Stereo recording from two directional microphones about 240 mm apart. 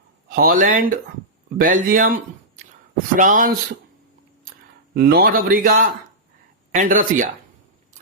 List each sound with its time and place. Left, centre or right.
0.3 s a man's voice: right
3.2 s a man's voice: right
4.9 s a man's voice: right